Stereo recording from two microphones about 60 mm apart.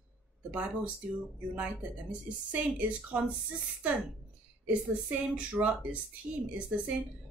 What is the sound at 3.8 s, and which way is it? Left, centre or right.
Speech, right.